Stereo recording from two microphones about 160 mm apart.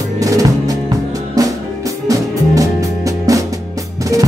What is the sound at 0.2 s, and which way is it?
Music, 20° right (ahead or behind).